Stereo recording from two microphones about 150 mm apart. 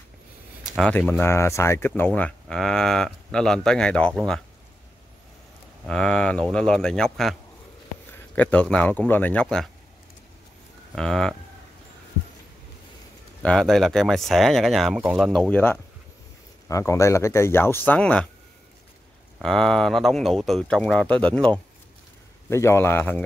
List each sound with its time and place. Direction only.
0.7 s speech: 5° left (ahead or behind)
5.9 s speech: 5° left (ahead or behind)
11.0 s speech: 5° left (ahead or behind)
13.4 s speech: 5° left (ahead or behind)
19.4 s speech: 5° left (ahead or behind)